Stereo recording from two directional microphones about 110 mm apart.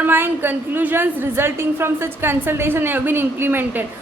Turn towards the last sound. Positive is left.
turn(degrees=-20)  # may be behind; listen again after turning